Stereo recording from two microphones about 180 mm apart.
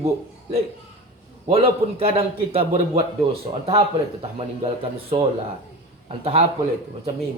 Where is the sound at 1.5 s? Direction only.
30° right (ahead or behind).